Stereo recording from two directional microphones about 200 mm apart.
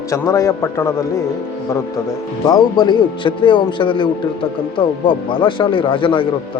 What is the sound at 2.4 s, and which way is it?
Speech, 20° left (ahead or behind).